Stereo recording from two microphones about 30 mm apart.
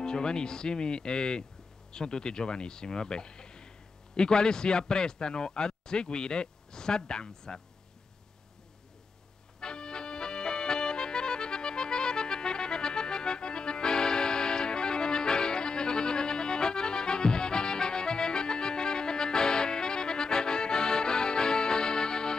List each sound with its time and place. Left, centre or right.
0.0 s speech: left
9.6 s accordion: left